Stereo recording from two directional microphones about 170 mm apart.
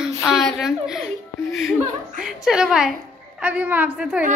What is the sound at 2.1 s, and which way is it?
A woman's voice, 5° right (ahead or behind).